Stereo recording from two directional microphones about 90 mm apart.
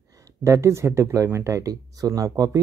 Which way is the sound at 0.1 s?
35° right (ahead or behind).